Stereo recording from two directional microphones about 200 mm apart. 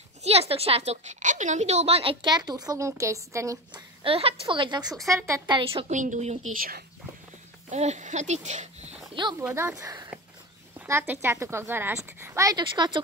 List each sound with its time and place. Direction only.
0.2 s a woman's voice: 30° right (ahead or behind); by 5.6 s 15° right (ahead or behind)
5.6 s speech: 30° right (ahead or behind)
7.7 s speech: 35° right (ahead or behind)
9.4 s a woman's voice: 15° right (ahead or behind)